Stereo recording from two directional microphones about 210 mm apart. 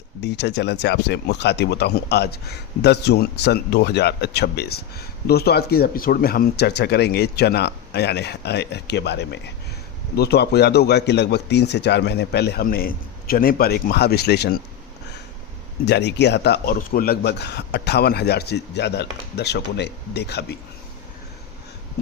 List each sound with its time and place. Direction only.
0.2 s speech: 55° left (ahead or behind)
15.9 s speech: 55° left (ahead or behind)